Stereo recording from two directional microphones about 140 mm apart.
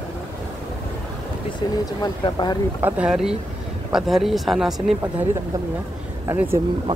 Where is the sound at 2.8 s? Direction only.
10° right (ahead or behind).